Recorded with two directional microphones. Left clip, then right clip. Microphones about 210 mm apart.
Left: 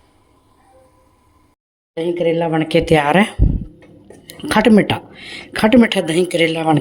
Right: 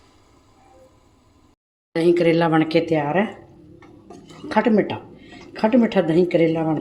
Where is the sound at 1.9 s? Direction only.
10° right (ahead or behind).